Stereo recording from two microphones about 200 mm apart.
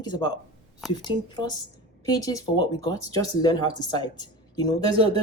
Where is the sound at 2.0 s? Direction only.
20° left (ahead or behind).